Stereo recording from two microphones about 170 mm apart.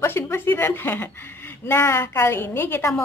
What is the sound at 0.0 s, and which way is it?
A child's voice, 15° left (ahead or behind).